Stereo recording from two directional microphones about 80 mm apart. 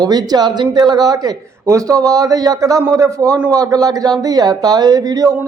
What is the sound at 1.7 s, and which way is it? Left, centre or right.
A man's voice, right.